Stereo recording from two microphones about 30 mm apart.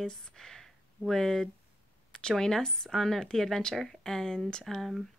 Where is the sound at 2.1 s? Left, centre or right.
Left.